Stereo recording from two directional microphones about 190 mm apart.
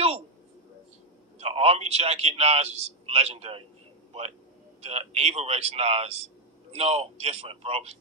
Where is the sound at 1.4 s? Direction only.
35° right (ahead or behind).